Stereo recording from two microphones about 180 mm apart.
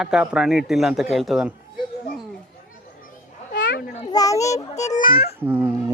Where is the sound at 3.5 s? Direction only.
90° left.